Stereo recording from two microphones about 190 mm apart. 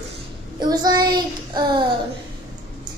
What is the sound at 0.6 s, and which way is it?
Child singing, 20° right (ahead or behind).